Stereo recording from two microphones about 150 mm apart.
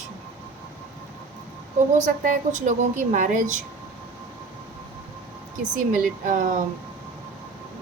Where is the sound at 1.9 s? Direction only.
60° right (ahead or behind).